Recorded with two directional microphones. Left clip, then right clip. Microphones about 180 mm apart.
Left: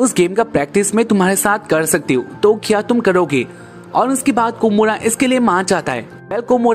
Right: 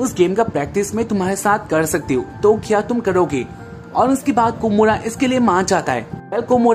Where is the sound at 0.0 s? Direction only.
35° left (ahead or behind).